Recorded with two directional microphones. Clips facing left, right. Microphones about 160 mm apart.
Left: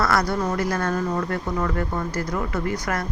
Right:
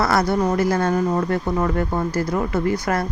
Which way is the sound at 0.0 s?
25° right (ahead or behind).